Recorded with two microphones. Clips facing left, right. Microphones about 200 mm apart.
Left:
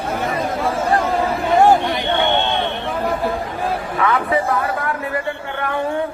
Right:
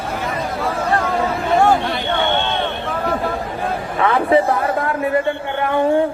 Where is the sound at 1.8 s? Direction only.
15° left (ahead or behind).